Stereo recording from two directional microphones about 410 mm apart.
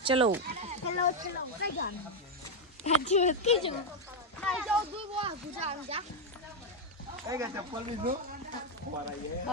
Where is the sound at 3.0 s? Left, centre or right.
Centre.